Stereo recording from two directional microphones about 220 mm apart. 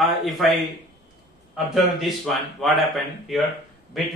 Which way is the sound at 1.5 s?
Centre (ahead or behind).